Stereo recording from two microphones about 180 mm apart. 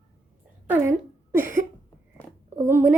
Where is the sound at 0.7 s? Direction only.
15° right (ahead or behind).